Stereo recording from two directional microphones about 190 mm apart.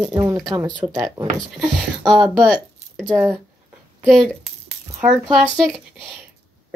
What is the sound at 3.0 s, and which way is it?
Speech, 10° right (ahead or behind).